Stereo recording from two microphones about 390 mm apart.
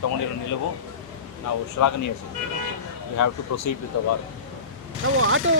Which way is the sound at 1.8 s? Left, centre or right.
Left.